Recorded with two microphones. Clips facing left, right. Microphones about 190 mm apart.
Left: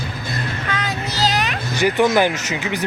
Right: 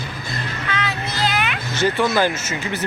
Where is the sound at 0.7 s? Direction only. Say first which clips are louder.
Right 1 dB; 40° left (ahead or behind).